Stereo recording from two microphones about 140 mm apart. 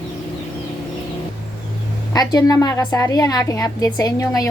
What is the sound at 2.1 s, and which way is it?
A woman's voice, 25° left (ahead or behind).